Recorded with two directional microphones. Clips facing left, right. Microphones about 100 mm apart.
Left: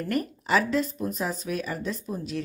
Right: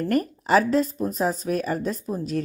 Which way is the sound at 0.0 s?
40° right (ahead or behind).